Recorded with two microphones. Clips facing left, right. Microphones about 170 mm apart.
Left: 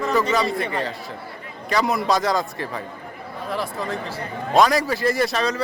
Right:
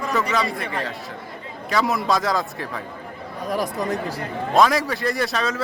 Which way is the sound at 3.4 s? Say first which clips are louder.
Right 3 dB; 15° right (ahead or behind).